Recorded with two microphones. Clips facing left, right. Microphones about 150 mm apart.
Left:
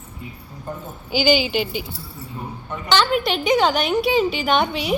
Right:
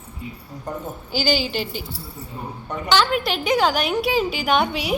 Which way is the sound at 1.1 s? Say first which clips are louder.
Left 4 dB; 35° right (ahead or behind).